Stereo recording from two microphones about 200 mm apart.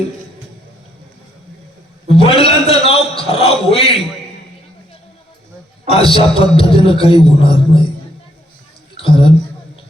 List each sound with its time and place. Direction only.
2.0 s a man's voice: 30° left (ahead or behind)
5.9 s a man's voice: 30° left (ahead or behind)
9.0 s a woman's voice: 30° left (ahead or behind)